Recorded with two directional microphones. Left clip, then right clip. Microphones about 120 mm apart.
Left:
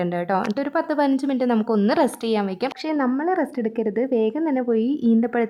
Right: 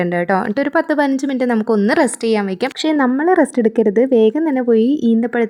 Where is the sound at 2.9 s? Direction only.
45° right (ahead or behind).